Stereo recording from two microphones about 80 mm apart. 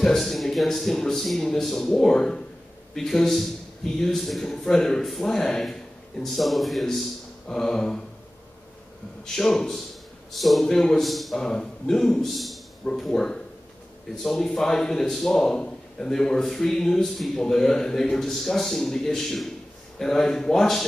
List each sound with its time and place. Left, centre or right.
0.0 s a man's voice: centre
9.2 s a man's voice: centre